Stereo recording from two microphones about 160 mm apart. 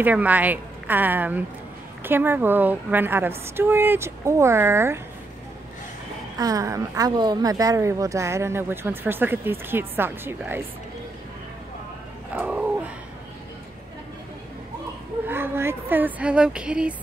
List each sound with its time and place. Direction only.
0.0 s speech: 10° right (ahead or behind)
6.3 s speech: 20° right (ahead or behind)
12.4 s a sound: 10° right (ahead or behind)
15.2 s speech: 15° right (ahead or behind)